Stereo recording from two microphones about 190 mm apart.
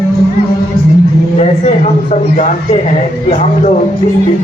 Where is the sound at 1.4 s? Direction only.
35° left (ahead or behind).